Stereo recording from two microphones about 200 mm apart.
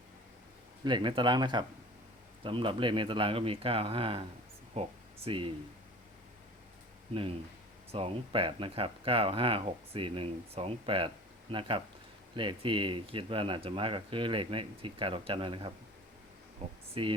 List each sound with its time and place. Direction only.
0.9 s speech: 25° right (ahead or behind)
4.7 s a sound: 30° right (ahead or behind)
7.1 s speech: 30° right (ahead or behind)
16.9 s speech: 25° right (ahead or behind)